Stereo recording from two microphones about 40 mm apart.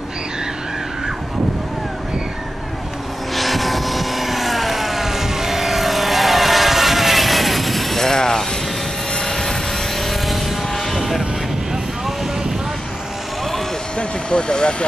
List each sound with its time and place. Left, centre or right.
3.3 s vehicle: centre
10.0 s a sound: centre
10.9 s vehicle: centre
13.9 s vehicle: left